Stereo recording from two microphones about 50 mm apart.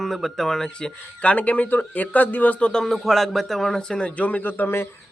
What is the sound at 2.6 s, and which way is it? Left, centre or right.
Speech, left.